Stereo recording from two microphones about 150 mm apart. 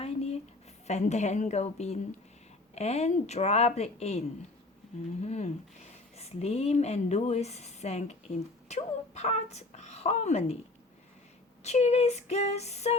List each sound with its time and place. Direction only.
0.0 s a sound: 45° left (ahead or behind)
0.9 s a woman's voice: 50° left (ahead or behind)
5.2 s a woman's voice: 50° left (ahead or behind)
11.6 s a woman's voice: 45° left (ahead or behind)